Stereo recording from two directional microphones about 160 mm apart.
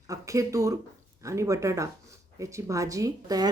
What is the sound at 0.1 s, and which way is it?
Speech, 20° right (ahead or behind).